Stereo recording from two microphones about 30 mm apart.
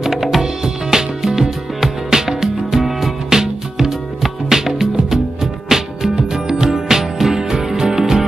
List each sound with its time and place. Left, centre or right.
0.1 s music: centre
0.4 s music: centre
3.3 s music: centre